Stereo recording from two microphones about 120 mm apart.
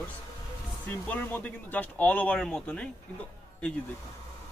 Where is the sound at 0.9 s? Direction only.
15° left (ahead or behind).